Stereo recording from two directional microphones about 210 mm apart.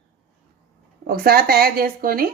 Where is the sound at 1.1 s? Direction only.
45° right (ahead or behind).